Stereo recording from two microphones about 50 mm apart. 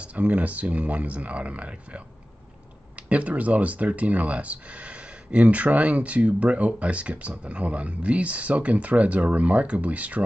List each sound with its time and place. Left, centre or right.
0.0 s speech: right